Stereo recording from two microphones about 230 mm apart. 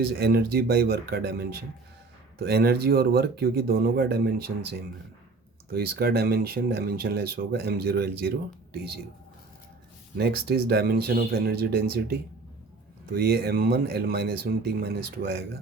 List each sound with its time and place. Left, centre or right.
0.1 s speech: right
10.2 s speech: right